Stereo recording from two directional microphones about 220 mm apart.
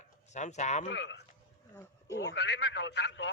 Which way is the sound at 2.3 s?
50° left (ahead or behind).